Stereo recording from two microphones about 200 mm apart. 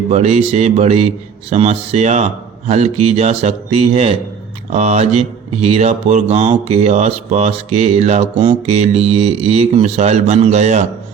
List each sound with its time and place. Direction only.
0.1 s speech: 35° right (ahead or behind)